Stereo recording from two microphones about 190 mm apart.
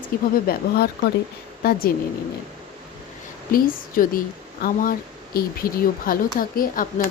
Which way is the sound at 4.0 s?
45° left (ahead or behind).